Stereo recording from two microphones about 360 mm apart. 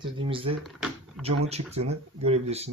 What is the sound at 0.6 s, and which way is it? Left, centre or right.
Typing, centre.